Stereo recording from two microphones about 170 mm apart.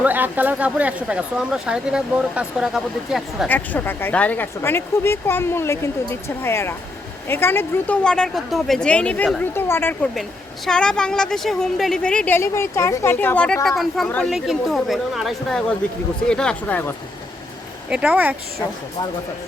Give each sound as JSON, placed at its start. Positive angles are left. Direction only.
{"t": 0.0, "sound": "speech", "side_deg": -10}
{"t": 3.4, "sound": "speech", "side_deg": 10}
{"t": 17.8, "sound": "speech", "side_deg": -5}